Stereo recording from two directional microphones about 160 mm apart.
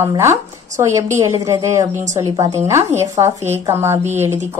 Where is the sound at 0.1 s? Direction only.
20° right (ahead or behind).